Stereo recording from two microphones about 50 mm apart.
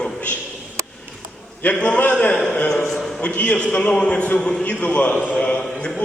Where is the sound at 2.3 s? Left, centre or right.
Centre.